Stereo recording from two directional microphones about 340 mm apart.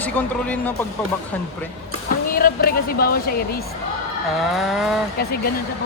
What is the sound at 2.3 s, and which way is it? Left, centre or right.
Speech, left.